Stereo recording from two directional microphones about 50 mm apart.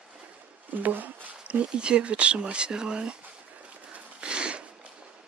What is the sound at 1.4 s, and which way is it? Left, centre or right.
Speech, right.